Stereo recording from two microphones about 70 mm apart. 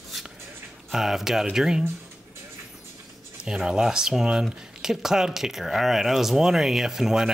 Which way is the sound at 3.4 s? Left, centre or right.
Centre.